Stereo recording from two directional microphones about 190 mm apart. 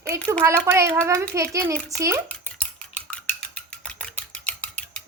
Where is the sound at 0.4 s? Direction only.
15° right (ahead or behind).